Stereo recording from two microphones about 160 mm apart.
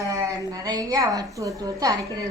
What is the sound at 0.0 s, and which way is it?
A woman's voice, 20° right (ahead or behind).